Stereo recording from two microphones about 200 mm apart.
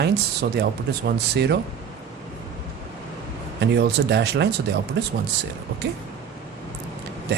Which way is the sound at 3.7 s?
55° right (ahead or behind).